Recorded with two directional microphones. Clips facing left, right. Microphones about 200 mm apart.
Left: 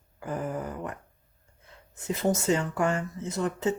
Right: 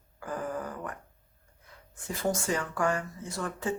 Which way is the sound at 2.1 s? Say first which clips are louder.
Left 5 dB; 20° left (ahead or behind).